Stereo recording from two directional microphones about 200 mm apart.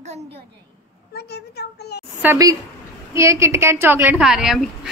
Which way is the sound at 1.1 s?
55° left (ahead or behind).